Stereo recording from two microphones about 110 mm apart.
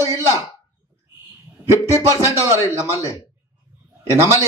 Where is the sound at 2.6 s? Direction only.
30° left (ahead or behind).